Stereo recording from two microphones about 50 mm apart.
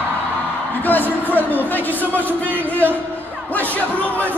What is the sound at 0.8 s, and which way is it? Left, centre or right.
Speech, left.